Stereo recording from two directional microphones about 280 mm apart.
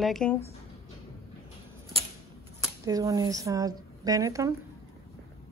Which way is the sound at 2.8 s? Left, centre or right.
Centre.